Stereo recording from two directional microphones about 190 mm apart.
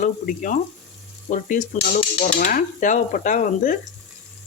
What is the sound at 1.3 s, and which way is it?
Dishes, 45° left (ahead or behind).